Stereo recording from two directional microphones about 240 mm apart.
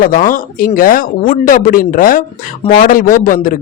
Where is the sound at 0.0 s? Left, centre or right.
Left.